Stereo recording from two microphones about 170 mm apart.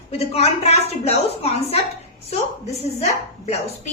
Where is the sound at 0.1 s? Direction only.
35° left (ahead or behind).